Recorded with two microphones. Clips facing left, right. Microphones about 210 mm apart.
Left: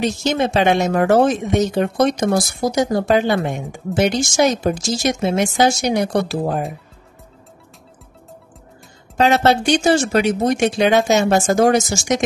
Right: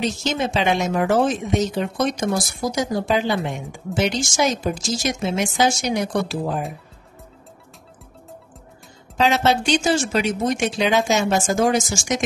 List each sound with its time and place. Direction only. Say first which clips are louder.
0.2 s speech: left 5 dB; 55° left (ahead or behind)
9.1 s speech: left 4 dB; 55° left (ahead or behind)